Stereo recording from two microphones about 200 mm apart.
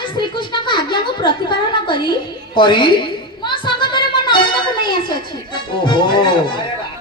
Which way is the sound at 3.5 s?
25° left (ahead or behind).